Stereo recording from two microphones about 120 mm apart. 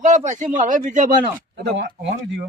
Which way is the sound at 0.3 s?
90° right.